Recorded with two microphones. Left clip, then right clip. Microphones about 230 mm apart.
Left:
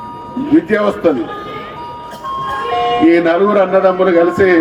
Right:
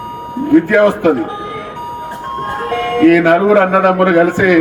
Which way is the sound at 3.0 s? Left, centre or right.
Right.